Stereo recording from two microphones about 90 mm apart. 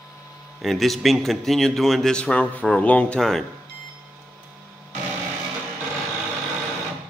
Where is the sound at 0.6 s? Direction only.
Centre (ahead or behind).